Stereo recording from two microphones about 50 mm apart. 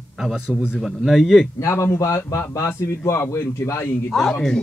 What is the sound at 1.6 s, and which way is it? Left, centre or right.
A man's voice, left.